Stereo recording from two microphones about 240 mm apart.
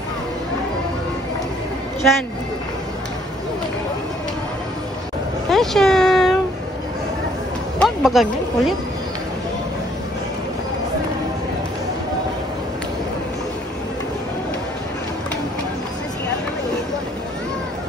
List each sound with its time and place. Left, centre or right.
5.5 s speech: centre
7.8 s speech: centre